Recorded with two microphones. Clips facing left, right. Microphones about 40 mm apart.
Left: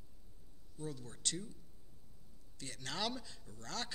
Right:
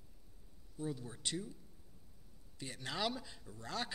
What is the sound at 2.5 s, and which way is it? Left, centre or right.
A man's voice, centre.